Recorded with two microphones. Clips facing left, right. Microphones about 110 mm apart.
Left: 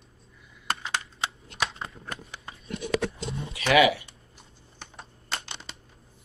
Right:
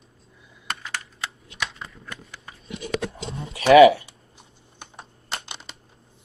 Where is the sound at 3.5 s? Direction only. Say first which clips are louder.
Right 9 dB; 30° right (ahead or behind).